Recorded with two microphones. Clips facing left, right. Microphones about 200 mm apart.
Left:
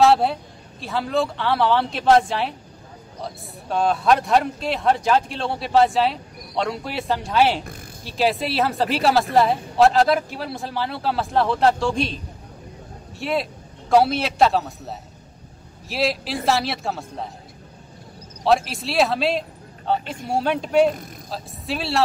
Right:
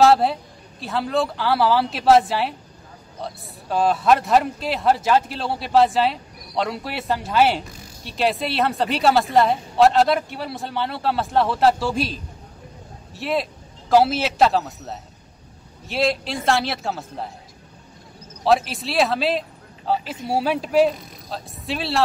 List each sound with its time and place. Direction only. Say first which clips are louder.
0.0 s a man's voice: right 1 dB; centre (ahead or behind)
7.6 s speech: left 3 dB; 55° left (ahead or behind)
8.0 s a man's voice: left 1 dB; centre (ahead or behind)
18.4 s a man's voice: even; centre (ahead or behind)